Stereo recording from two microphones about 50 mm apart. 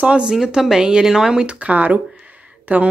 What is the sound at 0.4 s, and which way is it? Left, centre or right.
Speech, centre.